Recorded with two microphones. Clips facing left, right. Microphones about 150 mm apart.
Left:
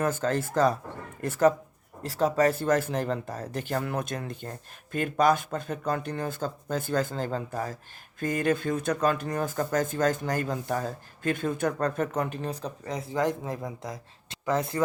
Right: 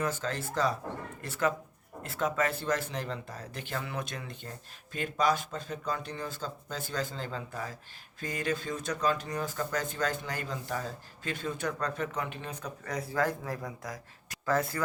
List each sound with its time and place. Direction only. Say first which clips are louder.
0.0 s speech: left 6 dB; 45° left (ahead or behind)
12.8 s speech: left 3 dB; 20° left (ahead or behind)